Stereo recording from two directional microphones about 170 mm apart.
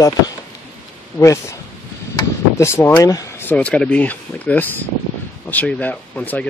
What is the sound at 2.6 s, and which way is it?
Speech, 15° left (ahead or behind).